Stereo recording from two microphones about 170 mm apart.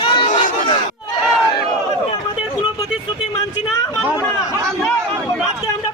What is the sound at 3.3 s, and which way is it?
Speech, 20° left (ahead or behind).